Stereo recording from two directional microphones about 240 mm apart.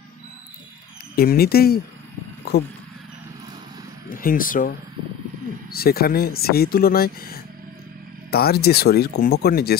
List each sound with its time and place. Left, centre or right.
1.1 s speech: left
4.1 s speech: left